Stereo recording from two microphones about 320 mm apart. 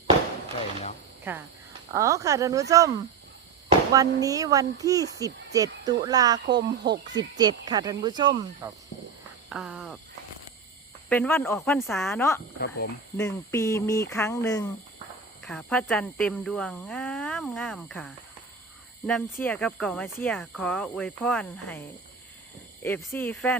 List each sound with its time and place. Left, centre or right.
1.3 s speech: centre
3.9 s speech: centre
9.5 s speech: centre
11.1 s speech: centre
12.5 s speech: left
13.1 s speech: centre
22.8 s speech: centre